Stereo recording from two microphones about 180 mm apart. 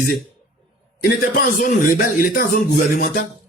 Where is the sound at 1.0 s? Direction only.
55° left (ahead or behind).